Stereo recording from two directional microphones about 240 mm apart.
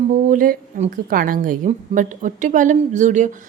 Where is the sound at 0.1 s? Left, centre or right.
Right.